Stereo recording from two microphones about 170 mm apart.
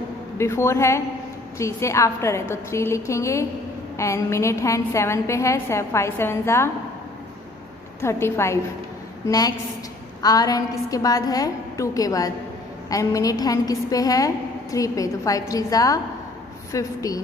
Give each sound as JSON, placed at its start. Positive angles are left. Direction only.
{"t": 0.4, "sound": "a woman's voice", "side_deg": 15}
{"t": 8.0, "sound": "a woman's voice", "side_deg": 15}